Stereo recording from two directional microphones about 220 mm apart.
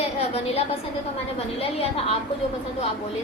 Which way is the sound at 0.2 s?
25° left (ahead or behind).